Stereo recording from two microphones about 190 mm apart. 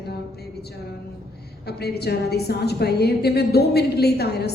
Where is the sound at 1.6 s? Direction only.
60° left (ahead or behind).